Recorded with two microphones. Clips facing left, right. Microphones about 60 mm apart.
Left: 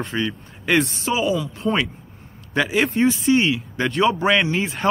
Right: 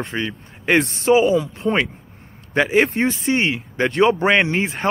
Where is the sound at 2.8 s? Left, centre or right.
Right.